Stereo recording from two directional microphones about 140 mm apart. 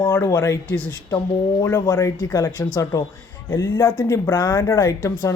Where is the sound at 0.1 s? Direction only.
20° left (ahead or behind).